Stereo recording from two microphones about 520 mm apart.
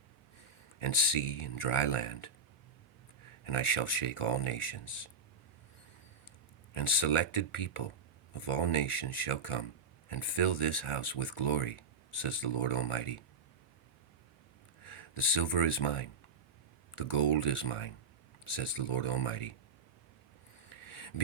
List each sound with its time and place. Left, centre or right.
0.8 s speech: left
3.4 s speech: left
6.7 s speech: left
14.8 s speech: left
20.7 s a sound: left